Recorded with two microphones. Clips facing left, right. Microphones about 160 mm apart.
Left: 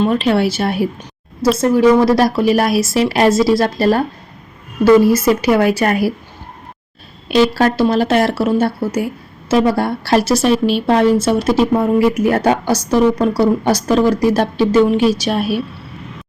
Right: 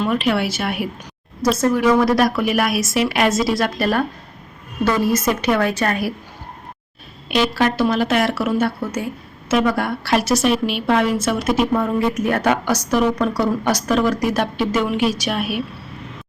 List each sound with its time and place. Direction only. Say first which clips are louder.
0.0 s a woman's voice: left 5 dB; 30° left (ahead or behind)
5.8 s a woman's voice: left 5 dB; 30° left (ahead or behind)
7.3 s a woman's voice: left 5 dB; 35° left (ahead or behind)